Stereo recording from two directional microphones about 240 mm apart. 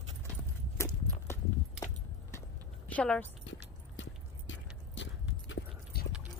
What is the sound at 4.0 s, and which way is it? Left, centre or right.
Horse, left.